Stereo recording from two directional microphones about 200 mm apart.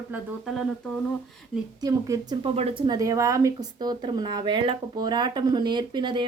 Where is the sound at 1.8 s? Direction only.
15° right (ahead or behind).